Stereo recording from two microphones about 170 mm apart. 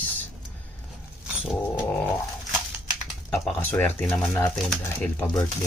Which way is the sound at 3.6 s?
10° left (ahead or behind).